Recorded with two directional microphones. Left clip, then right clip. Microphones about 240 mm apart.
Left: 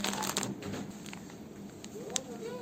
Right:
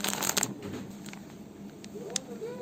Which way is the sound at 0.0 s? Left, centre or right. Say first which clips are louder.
Right 3 dB; right.